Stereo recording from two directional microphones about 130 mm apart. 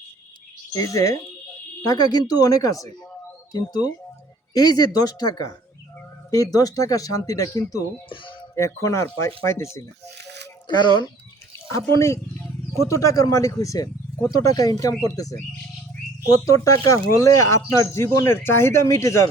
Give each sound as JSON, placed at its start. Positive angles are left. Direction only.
{"t": 0.7, "sound": "speech", "side_deg": 25}
{"t": 8.1, "sound": "a sound", "side_deg": 40}
{"t": 8.5, "sound": "speech", "side_deg": 20}
{"t": 10.8, "sound": "speech", "side_deg": 35}
{"t": 11.5, "sound": "speech", "side_deg": 20}